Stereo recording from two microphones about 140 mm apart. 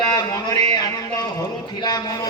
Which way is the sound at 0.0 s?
25° left (ahead or behind).